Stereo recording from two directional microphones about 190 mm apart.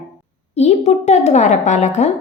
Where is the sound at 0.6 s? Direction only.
35° left (ahead or behind).